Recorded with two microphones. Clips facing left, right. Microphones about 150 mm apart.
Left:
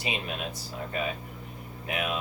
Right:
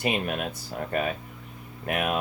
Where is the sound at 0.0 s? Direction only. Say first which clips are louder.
Right 6 dB; 55° right (ahead or behind).